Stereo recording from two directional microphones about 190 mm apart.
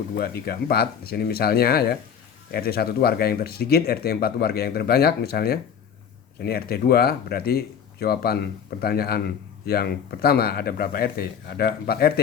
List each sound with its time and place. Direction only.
0.2 s speech: 55° left (ahead or behind)